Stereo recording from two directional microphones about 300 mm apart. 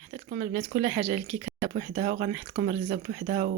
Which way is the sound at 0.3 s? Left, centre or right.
Right.